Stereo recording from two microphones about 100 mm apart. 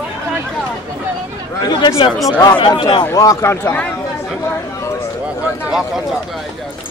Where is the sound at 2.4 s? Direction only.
50° left (ahead or behind).